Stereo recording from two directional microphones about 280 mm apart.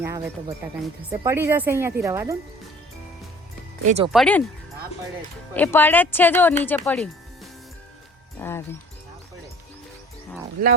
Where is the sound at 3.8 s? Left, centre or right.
Right.